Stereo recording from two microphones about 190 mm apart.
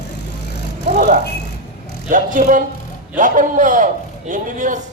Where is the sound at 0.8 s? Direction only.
40° right (ahead or behind).